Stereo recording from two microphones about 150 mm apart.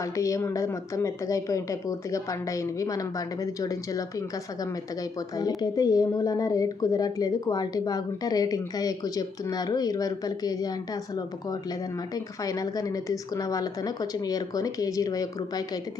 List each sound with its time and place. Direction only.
0.0 s speech: 20° left (ahead or behind)
5.4 s speech: 25° left (ahead or behind)